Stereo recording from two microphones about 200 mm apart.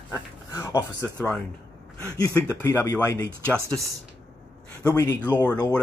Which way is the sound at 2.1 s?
15° left (ahead or behind).